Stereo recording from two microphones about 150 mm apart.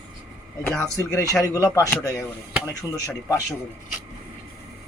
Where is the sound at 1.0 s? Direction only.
20° left (ahead or behind).